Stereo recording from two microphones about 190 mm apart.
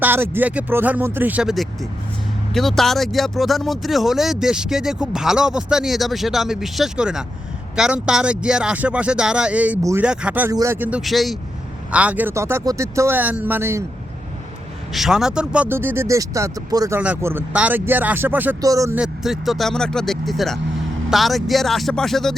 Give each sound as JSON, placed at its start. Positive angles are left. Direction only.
{"t": 0.0, "sound": "speech", "side_deg": -10}
{"t": 14.9, "sound": "speech", "side_deg": 0}
{"t": 18.9, "sound": "speech", "side_deg": -5}